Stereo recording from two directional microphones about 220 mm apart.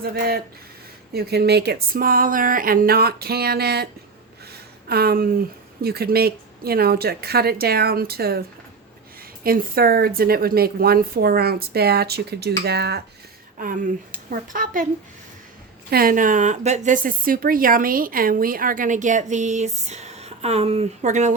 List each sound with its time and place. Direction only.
0.0 s speech: 45° right (ahead or behind)
4.5 s a sound: 45° right (ahead or behind)
5.8 s speech: 45° right (ahead or behind)
15.9 s speech: 40° right (ahead or behind)